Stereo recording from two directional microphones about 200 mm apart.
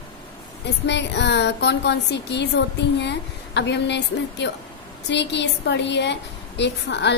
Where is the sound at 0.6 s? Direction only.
60° left (ahead or behind).